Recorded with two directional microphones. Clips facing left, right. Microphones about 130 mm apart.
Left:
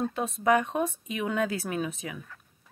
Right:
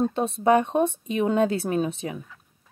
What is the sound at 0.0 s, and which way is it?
Speech, 25° right (ahead or behind).